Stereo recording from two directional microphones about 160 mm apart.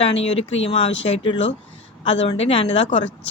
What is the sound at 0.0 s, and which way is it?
Speech, 40° left (ahead or behind).